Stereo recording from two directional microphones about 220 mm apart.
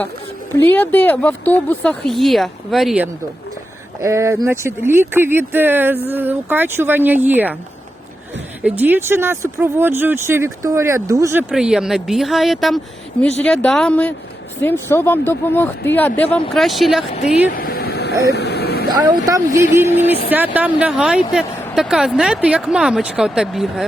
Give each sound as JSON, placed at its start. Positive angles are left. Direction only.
{"t": 0.6, "sound": "speech", "side_deg": 10}
{"t": 4.0, "sound": "speech", "side_deg": -15}
{"t": 8.6, "sound": "speech", "side_deg": -10}
{"t": 17.1, "sound": "speech", "side_deg": 30}
{"t": 18.3, "sound": "vehicle", "side_deg": 50}
{"t": 18.9, "sound": "speech", "side_deg": -15}
{"t": 19.8, "sound": "speech", "side_deg": 30}
{"t": 20.3, "sound": "speech", "side_deg": -5}